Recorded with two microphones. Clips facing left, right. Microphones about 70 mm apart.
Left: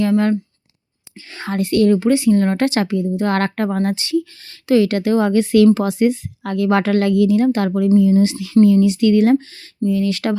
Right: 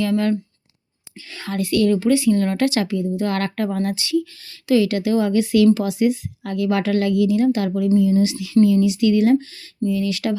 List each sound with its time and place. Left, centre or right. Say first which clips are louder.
0.0 s a woman's voice: left 3 dB; left